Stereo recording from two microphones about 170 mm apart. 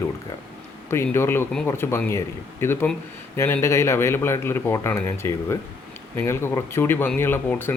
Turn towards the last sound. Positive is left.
turn(degrees=10)  # may be behind; listen again after turning